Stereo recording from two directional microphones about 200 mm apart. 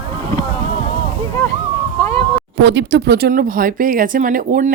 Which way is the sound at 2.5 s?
60° right (ahead or behind).